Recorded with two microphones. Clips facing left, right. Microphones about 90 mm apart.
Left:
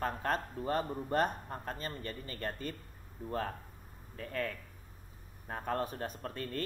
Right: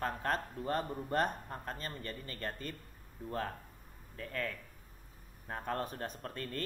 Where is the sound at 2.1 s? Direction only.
45° right (ahead or behind).